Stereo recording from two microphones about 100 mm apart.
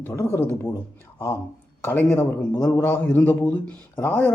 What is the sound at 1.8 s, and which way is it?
A man's voice, 20° left (ahead or behind).